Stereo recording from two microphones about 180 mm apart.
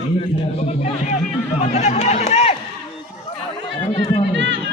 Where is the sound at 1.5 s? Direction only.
35° left (ahead or behind).